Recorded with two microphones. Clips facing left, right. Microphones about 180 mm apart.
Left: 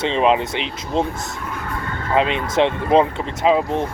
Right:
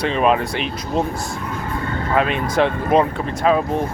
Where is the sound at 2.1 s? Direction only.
20° left (ahead or behind).